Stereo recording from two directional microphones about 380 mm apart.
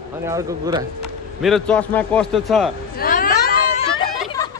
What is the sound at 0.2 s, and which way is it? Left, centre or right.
Speech, centre.